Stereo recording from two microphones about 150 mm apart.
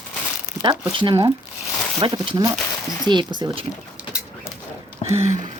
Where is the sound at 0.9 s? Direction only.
35° right (ahead or behind).